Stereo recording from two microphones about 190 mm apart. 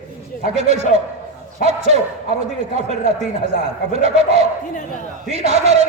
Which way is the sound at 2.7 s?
35° right (ahead or behind).